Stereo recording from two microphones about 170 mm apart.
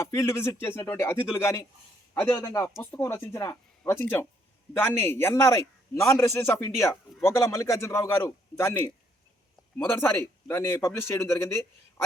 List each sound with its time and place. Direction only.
0.0 s a man's voice: 15° left (ahead or behind)